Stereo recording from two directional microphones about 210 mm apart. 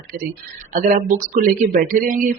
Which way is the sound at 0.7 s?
40° right (ahead or behind).